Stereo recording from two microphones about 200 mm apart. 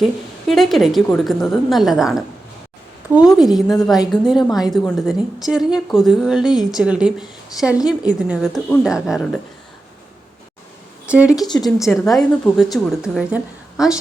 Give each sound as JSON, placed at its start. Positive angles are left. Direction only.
{"t": 0.0, "sound": "a woman's voice", "side_deg": 0}
{"t": 11.1, "sound": "a woman's voice", "side_deg": -5}
{"t": 11.3, "sound": "speech", "side_deg": 20}
{"t": 11.6, "sound": "a woman's voice", "side_deg": 0}